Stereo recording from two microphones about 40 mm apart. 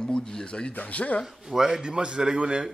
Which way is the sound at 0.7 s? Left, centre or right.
Left.